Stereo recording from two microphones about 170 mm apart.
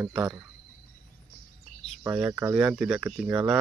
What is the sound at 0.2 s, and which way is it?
Speech, 20° right (ahead or behind).